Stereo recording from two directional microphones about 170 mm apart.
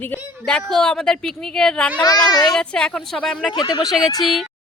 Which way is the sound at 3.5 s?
25° left (ahead or behind).